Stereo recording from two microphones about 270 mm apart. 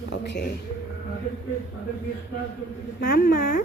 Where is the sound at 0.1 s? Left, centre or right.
Left.